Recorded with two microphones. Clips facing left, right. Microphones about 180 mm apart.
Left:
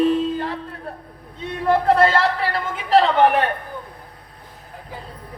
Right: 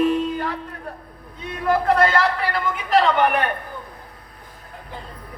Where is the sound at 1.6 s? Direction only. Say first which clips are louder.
Left 2 dB; 30° left (ahead or behind).